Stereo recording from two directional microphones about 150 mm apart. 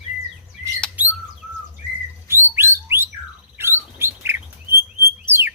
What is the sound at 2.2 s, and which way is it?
Bird, 15° right (ahead or behind).